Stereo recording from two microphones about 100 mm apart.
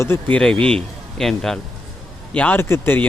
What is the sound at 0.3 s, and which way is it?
Speech, 10° left (ahead or behind).